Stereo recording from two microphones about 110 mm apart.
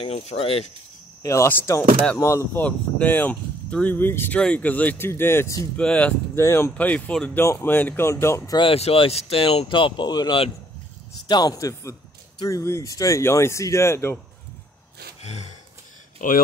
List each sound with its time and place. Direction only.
0.0 s speech: 70° left (ahead or behind)
1.2 s speech: 25° left (ahead or behind)
2.6 s speech: 15° left (ahead or behind)
5.8 s speech: 10° left (ahead or behind)
6.3 s speech: 25° left (ahead or behind)
6.7 s speech: 10° left (ahead or behind)
8.5 s a man's voice: 60° left (ahead or behind); by 14.1 s 25° left (ahead or behind)
15.2 s gasp: 90° left